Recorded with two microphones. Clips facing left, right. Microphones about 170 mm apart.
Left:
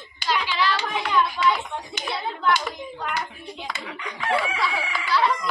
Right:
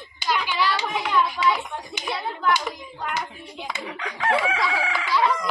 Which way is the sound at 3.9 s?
90° right.